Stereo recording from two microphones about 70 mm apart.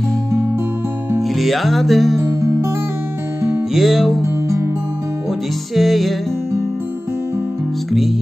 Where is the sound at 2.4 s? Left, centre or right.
Right.